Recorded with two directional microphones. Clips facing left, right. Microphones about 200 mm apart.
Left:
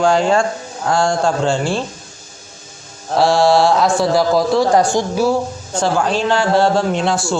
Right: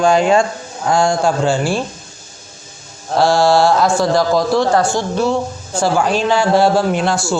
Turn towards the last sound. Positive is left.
turn(degrees=0)  # may be behind; listen again after turning